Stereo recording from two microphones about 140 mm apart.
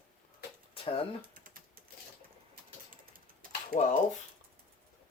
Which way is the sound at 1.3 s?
80° right.